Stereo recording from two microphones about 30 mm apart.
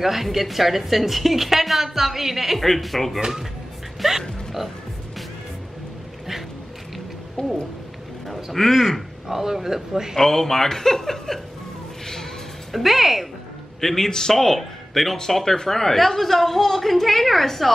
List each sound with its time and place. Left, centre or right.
0.0 s speech: centre
7.4 s speech: left
8.5 s a woman's voice: centre
9.3 s speech: centre
10.1 s a woman's voice: centre
12.7 s speech: centre
13.7 s a woman's voice: centre